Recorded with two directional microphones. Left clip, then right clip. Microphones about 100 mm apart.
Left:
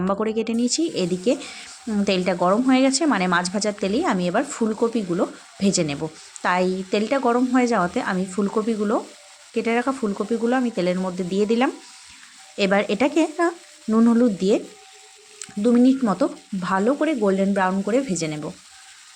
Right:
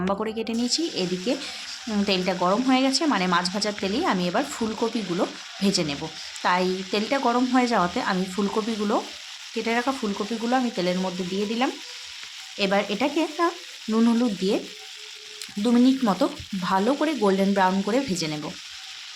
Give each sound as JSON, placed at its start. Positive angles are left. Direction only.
{"t": 0.0, "sound": "speech", "side_deg": 35}
{"t": 5.6, "sound": "speech", "side_deg": 45}
{"t": 7.2, "sound": "stir", "side_deg": 25}
{"t": 9.6, "sound": "speech", "side_deg": 30}
{"t": 11.3, "sound": "speech", "side_deg": 55}
{"t": 13.9, "sound": "speech", "side_deg": 35}
{"t": 15.6, "sound": "stir", "side_deg": 20}